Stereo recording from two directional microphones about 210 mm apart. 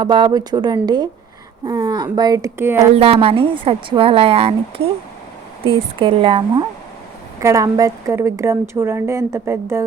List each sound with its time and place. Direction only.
0.0 s a woman's voice: 20° right (ahead or behind)
2.9 s a woman's voice: 30° right (ahead or behind); by 9.8 s 15° right (ahead or behind)